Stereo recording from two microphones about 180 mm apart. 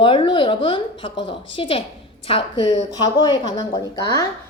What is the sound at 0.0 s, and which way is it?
A woman's voice, 30° left (ahead or behind).